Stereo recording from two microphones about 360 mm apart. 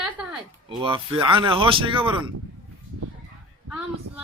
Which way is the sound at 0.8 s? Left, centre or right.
Centre.